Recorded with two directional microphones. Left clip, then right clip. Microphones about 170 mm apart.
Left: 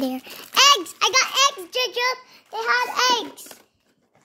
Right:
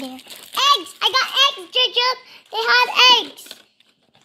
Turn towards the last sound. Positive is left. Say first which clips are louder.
# right 7 dB
turn(degrees=0)  # may be behind; listen again after turning